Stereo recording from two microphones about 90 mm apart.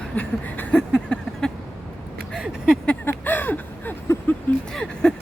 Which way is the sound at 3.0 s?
20° left (ahead or behind).